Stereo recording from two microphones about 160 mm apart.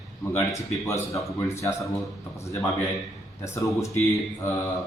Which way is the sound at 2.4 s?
20° left (ahead or behind).